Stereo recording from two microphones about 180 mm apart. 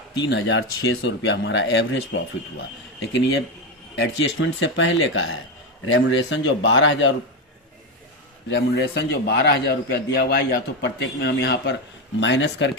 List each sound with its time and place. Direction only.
0.2 s speech: 85° left
3.0 s speech: 80° left
8.4 s a man's voice: 70° left (ahead or behind)
12.2 s speech: 90° left